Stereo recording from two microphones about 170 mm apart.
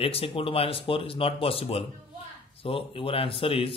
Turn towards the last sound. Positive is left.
turn(degrees=30)  # may be behind; listen again after turning